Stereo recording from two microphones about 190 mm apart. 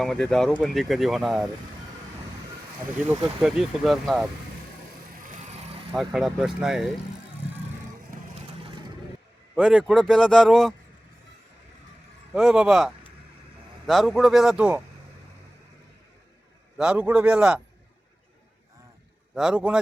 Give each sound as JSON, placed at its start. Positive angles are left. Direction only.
{"t": 0.0, "sound": "speech", "side_deg": 5}
{"t": 3.4, "sound": "speech", "side_deg": 0}
{"t": 5.9, "sound": "speech", "side_deg": 0}
{"t": 9.6, "sound": "speech", "side_deg": 0}
{"t": 12.3, "sound": "speech", "side_deg": 0}
{"t": 16.7, "sound": "speech", "side_deg": -5}
{"t": 19.3, "sound": "speech", "side_deg": -5}